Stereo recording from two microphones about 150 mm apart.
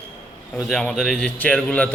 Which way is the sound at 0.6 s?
Centre (ahead or behind).